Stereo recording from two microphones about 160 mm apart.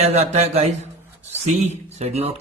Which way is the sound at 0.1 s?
40° right (ahead or behind).